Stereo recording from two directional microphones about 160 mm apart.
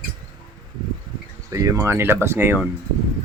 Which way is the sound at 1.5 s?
20° right (ahead or behind).